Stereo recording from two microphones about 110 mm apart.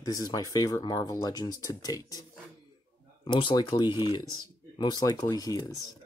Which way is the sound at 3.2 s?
45° left (ahead or behind).